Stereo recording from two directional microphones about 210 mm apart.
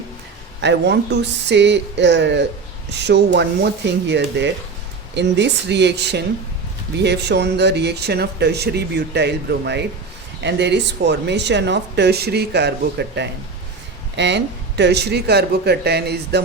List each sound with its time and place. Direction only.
0.6 s speech: 55° right (ahead or behind)